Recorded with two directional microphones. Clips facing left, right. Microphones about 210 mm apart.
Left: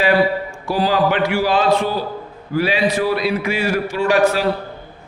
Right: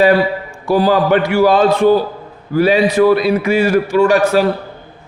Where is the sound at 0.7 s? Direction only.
45° right (ahead or behind).